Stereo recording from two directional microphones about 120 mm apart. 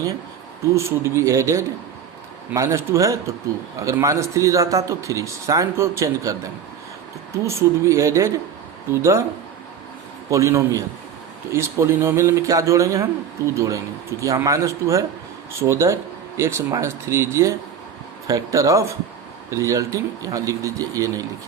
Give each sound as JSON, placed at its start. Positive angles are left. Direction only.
{"t": 0.6, "sound": "speech", "side_deg": -25}
{"t": 7.4, "sound": "speech", "side_deg": -25}
{"t": 10.2, "sound": "speech", "side_deg": -25}